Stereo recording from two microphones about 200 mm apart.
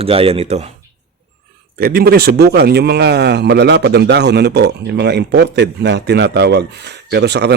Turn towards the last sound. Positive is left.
turn(degrees=-55)  # may be behind; listen again after turning